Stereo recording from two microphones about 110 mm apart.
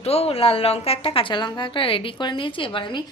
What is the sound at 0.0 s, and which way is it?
A woman's voice, 65° left (ahead or behind).